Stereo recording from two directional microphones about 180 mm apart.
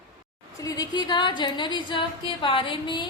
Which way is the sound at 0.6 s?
20° left (ahead or behind).